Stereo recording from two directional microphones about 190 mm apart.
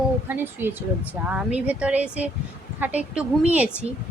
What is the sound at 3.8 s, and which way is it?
Speech, 35° right (ahead or behind).